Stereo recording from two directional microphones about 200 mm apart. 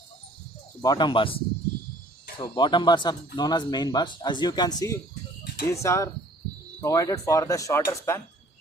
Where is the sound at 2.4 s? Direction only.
25° left (ahead or behind).